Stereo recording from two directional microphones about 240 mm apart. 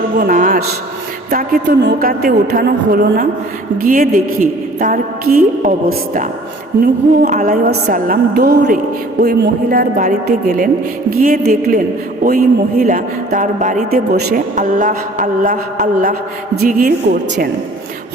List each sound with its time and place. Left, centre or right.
0.2 s a man's voice: right